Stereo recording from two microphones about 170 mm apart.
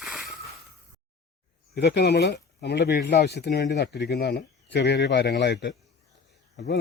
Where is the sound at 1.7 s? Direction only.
80° left.